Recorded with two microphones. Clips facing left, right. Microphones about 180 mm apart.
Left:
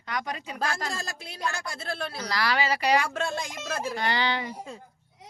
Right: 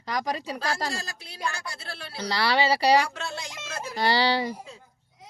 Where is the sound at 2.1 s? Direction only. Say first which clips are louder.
Right 4 dB; 30° right (ahead or behind).